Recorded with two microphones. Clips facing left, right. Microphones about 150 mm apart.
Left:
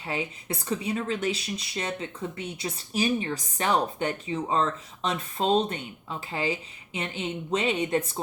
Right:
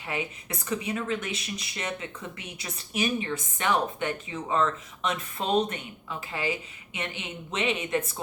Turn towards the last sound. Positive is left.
turn(degrees=30)  # may be behind; listen again after turning